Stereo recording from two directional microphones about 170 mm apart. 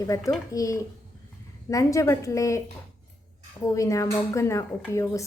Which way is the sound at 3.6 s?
20° left (ahead or behind).